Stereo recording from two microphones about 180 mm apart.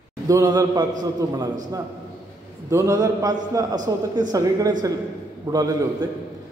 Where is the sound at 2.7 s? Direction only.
15° right (ahead or behind).